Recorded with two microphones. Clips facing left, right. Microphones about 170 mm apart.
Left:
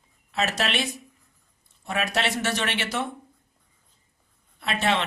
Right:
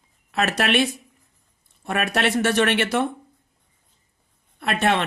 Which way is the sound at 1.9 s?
55° right (ahead or behind).